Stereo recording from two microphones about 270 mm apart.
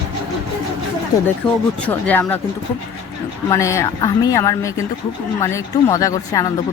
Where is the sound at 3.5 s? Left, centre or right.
Centre.